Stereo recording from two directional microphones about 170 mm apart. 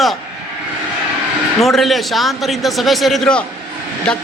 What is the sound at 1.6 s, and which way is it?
A man's voice, centre (ahead or behind).